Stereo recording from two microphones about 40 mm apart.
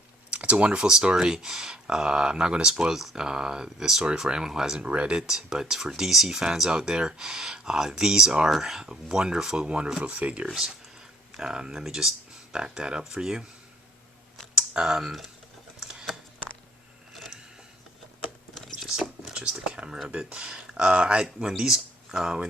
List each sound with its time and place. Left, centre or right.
0.3 s a sound: right
0.9 s speech: centre
4.8 s speech: right
8.4 s speech: centre
8.9 s speech: right
9.6 s speech: right
11.3 s speech: centre
14.8 s speech: centre
15.8 s a sound: centre
18.5 s a sound: centre
19.3 s a sound: right
19.5 s typing: right
20.1 s speech: right